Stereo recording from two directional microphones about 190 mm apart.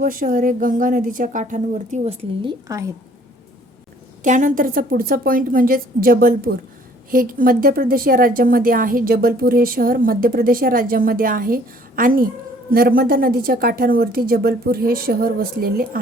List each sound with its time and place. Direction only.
0.0 s a woman's voice: 45° right (ahead or behind)
2.4 s a woman's voice: 20° right (ahead or behind)
4.2 s a woman's voice: 40° right (ahead or behind)